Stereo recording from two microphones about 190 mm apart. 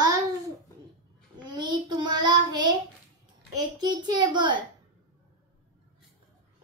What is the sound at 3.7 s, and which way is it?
Child singing, 20° right (ahead or behind).